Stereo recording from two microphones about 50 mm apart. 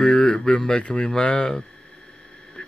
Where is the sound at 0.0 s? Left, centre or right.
Centre.